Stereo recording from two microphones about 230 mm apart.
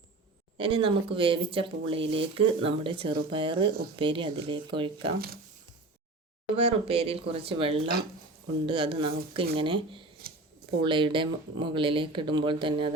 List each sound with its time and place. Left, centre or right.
0.5 s speech: right
6.6 s speech: right
10.2 s a sound: right
10.8 s speech: right